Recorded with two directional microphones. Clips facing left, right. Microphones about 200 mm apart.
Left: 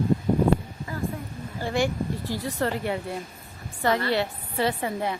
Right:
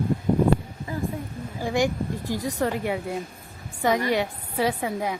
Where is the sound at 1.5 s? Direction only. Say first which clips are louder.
Right 1 dB; 15° right (ahead or behind).